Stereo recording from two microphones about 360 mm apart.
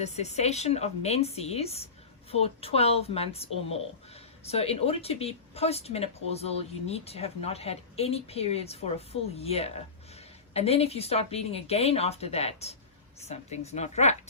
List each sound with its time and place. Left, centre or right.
0.0 s speech: centre